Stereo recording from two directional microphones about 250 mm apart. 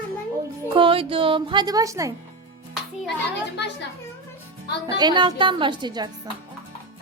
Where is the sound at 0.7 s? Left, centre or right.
Right.